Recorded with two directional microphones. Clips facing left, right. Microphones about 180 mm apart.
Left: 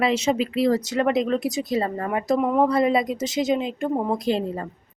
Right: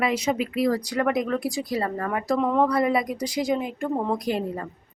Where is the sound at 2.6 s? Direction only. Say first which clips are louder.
Left 2 dB; 25° left (ahead or behind).